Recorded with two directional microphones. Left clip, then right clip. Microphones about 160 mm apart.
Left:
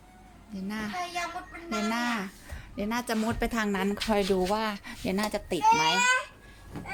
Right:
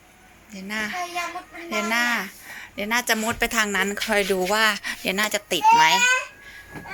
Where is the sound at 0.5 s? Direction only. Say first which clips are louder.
Right 7 dB; 5° left (ahead or behind).